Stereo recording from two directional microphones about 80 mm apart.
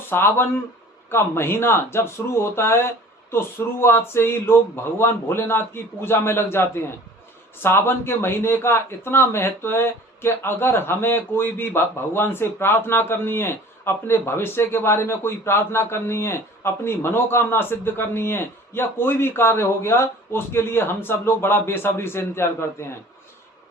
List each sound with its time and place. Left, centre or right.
0.1 s speech: left